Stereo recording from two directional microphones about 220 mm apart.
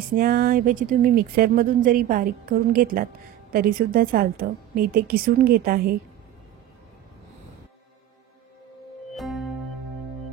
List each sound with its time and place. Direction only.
0.1 s speech: 40° right (ahead or behind)
9.1 s music: centre (ahead or behind)